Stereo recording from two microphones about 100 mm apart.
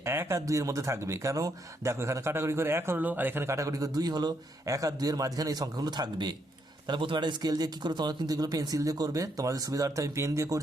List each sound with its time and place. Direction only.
0.0 s speech: 25° right (ahead or behind)